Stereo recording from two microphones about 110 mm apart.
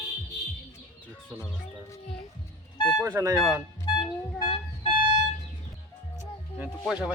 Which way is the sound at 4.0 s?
50° left (ahead or behind).